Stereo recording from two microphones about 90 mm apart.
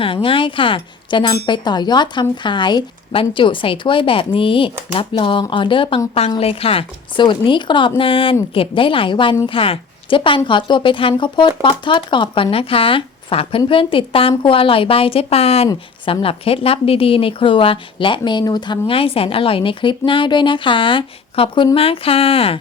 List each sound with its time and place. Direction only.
0.0 s speech: 80° left
6.4 s speech: 90° left; by 9.3 s 70° left (ahead or behind)
9.5 s speech: 85° left
13.7 s speech: 80° left
18.3 s speech: 55° left (ahead or behind); by 21.7 s 80° left
21.8 s speech: 90° left